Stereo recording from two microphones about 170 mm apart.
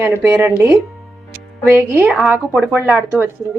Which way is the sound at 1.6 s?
15° right (ahead or behind).